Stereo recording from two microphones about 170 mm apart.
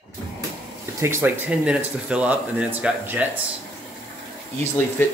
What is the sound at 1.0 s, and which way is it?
Speech, 15° right (ahead or behind).